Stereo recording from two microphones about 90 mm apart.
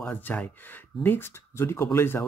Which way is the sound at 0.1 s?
20° left (ahead or behind).